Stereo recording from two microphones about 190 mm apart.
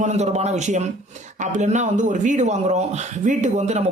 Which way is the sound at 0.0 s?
35° right (ahead or behind).